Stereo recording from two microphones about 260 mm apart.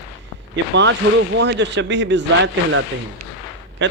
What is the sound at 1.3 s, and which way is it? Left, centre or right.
Speech, right.